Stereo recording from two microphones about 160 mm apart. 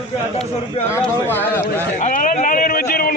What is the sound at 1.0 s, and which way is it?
Speech, 10° left (ahead or behind).